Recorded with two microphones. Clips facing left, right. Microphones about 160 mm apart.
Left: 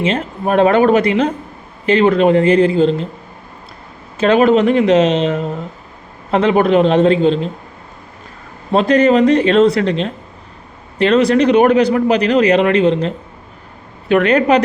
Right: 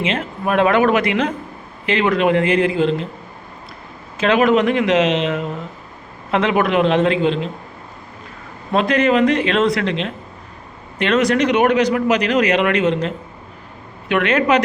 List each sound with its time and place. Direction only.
0.0 s a man's voice: 35° left (ahead or behind)
4.2 s a man's voice: 35° left (ahead or behind)
8.7 s a man's voice: 35° left (ahead or behind)